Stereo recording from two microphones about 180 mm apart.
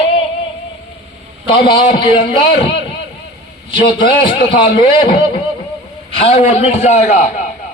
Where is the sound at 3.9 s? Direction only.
25° left (ahead or behind).